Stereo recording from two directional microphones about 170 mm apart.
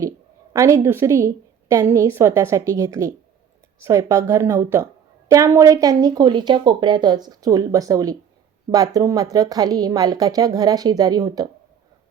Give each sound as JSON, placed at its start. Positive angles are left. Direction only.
{"t": 0.5, "sound": "a woman's voice", "side_deg": -20}